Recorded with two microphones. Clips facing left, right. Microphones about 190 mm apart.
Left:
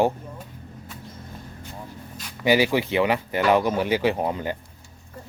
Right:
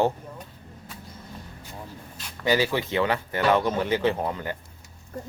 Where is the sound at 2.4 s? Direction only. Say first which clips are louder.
Left 4 dB; 15° left (ahead or behind).